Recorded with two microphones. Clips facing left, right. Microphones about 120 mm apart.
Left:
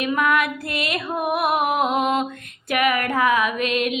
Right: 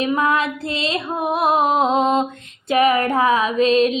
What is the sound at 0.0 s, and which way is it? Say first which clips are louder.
Music: right 2 dB; 25° right (ahead or behind).